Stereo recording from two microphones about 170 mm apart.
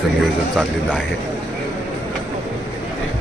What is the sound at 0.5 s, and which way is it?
Speech, 5° right (ahead or behind).